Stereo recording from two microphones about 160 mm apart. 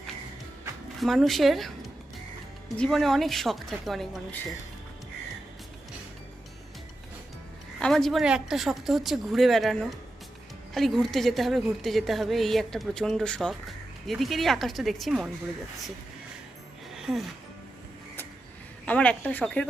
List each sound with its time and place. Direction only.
1.0 s a woman's voice: centre (ahead or behind)
2.7 s a woman's voice: centre (ahead or behind)
7.8 s a woman's voice: 5° left (ahead or behind)
10.8 s a woman's voice: centre (ahead or behind)
16.9 s music: centre (ahead or behind)
18.9 s speech: 10° left (ahead or behind)